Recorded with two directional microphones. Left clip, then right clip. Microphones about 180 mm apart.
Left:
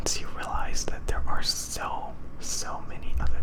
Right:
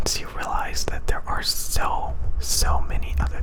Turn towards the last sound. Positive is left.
turn(degrees=-30)  # may be behind; listen again after turning